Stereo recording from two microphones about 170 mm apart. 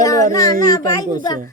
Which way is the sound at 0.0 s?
20° left (ahead or behind).